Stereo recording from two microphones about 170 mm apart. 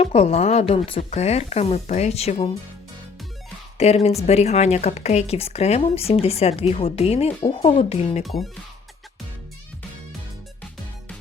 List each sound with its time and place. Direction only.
0.0 s speech: 35° left (ahead or behind)
3.8 s speech: 40° left (ahead or behind)
8.2 s speech: centre (ahead or behind)